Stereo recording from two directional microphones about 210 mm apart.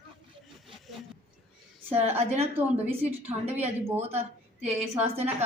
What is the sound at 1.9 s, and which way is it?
A woman's voice, 30° right (ahead or behind).